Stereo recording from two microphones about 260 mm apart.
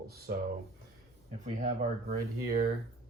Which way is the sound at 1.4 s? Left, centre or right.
Right.